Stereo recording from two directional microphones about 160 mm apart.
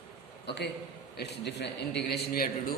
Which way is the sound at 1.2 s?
90° left.